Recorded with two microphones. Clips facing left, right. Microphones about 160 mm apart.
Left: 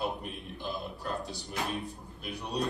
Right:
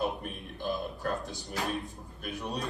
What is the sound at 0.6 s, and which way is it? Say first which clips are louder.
Speech: right 5 dB; 50° right (ahead or behind).